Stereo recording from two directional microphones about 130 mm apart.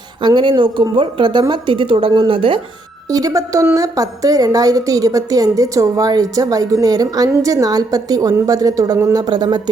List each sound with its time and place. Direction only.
0.2 s speech: 35° right (ahead or behind)
3.1 s a woman's voice: 25° right (ahead or behind)